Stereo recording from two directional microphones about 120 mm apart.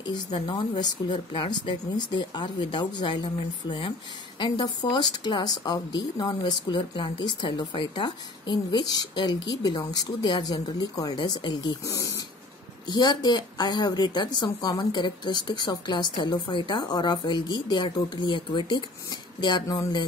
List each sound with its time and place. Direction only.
0.0 s speech: 40° left (ahead or behind)